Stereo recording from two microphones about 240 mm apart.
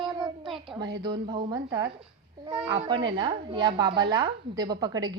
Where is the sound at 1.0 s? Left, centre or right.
Centre.